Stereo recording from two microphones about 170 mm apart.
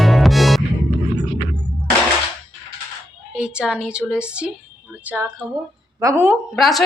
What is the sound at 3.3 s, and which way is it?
A woman's voice, 5° right (ahead or behind).